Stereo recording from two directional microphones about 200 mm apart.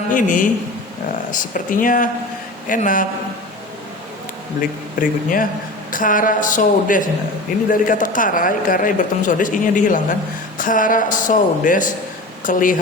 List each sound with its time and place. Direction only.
0.1 s a man's voice: 40° left (ahead or behind)
4.9 s speech: 45° left (ahead or behind)